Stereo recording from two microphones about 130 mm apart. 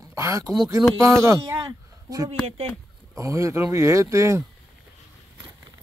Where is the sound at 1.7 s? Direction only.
30° right (ahead or behind).